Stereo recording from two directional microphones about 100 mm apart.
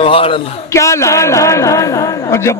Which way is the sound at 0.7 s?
30° left (ahead or behind).